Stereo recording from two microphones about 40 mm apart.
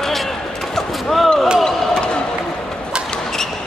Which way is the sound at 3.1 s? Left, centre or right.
Centre.